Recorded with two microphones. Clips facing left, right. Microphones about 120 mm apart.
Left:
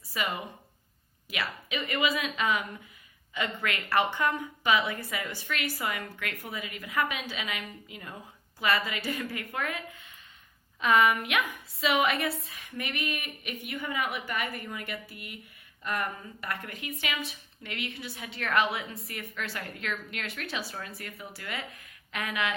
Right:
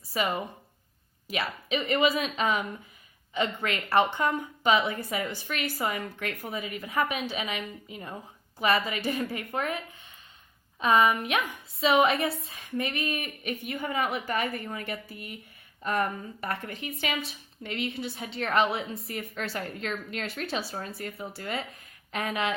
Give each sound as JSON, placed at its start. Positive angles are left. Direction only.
{"t": 0.1, "sound": "a woman's voice", "side_deg": -30}